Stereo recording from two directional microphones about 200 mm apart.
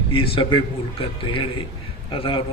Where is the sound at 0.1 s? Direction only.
25° left (ahead or behind).